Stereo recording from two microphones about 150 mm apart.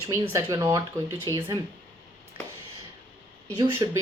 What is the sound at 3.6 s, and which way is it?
Speech, 30° right (ahead or behind).